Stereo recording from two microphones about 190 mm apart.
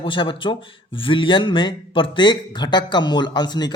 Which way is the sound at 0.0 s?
25° left (ahead or behind).